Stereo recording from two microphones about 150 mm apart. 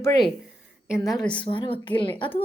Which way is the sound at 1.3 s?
35° left (ahead or behind).